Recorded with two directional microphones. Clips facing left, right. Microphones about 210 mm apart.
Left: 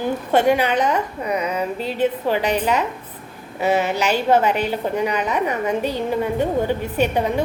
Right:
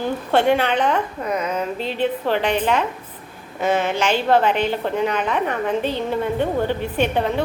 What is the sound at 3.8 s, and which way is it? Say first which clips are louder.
Speech: even; 40° left (ahead or behind).